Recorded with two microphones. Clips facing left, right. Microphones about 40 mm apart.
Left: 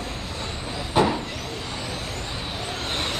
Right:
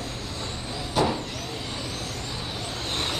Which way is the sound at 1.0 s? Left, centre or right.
Left.